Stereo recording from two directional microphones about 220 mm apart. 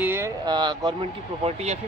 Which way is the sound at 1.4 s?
30° right (ahead or behind).